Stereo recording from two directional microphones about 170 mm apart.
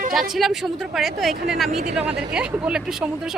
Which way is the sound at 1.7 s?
45° right (ahead or behind).